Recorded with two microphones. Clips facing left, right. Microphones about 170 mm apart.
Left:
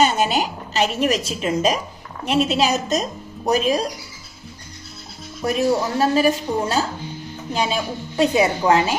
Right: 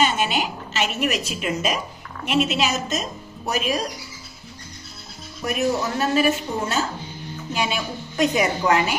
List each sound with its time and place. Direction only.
0.0 s a woman's voice: 40° left (ahead or behind)
5.4 s a woman's voice: 30° left (ahead or behind)